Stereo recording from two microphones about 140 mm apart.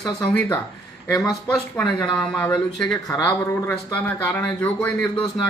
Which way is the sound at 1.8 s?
5° left (ahead or behind).